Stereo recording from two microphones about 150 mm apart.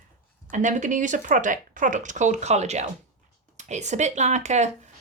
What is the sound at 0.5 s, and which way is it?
Speech, 55° right (ahead or behind).